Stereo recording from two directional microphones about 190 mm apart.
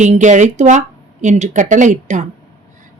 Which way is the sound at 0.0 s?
40° right (ahead or behind).